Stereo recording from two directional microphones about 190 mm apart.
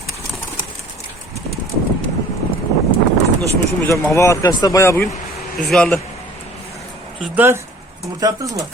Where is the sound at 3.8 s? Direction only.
10° left (ahead or behind).